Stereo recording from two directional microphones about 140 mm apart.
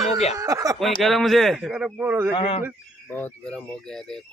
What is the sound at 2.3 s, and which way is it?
Speech, 40° left (ahead or behind).